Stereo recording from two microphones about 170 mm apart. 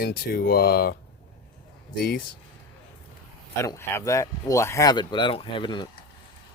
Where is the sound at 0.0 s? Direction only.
60° left (ahead or behind).